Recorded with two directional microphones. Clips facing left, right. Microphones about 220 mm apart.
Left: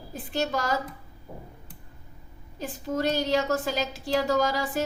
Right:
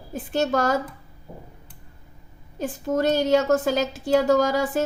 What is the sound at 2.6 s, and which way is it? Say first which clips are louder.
A woman's voice: right 5 dB; 50° right (ahead or behind).